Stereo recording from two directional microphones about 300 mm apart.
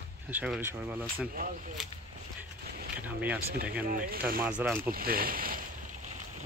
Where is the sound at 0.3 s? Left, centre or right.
Centre.